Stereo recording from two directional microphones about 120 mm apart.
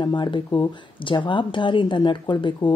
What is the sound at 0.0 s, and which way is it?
Speech, 40° left (ahead or behind).